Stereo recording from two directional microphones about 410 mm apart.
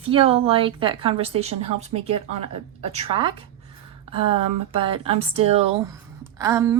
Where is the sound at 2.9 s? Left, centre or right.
Centre.